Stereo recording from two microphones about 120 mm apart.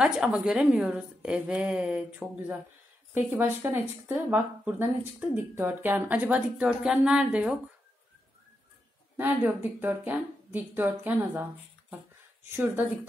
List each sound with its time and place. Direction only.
0.0 s speech: 5° right (ahead or behind)
9.1 s speech: 15° right (ahead or behind)